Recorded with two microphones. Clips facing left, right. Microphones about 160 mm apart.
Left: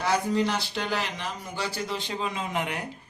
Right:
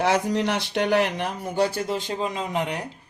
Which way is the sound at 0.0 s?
75° right (ahead or behind).